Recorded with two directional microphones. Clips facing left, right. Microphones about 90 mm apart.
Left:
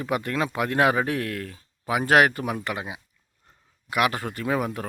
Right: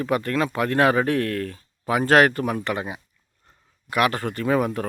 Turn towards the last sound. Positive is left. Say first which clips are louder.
# right 4 dB
turn(degrees=5)  # may be behind; listen again after turning